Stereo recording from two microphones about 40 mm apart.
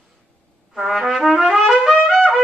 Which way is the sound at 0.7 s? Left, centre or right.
Centre.